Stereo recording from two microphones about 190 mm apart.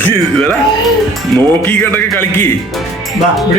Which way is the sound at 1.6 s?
10° left (ahead or behind).